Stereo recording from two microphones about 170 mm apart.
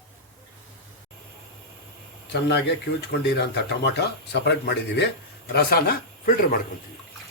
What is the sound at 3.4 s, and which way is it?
Speech, 75° left (ahead or behind).